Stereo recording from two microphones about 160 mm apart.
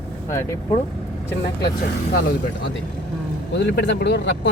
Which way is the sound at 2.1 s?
85° left.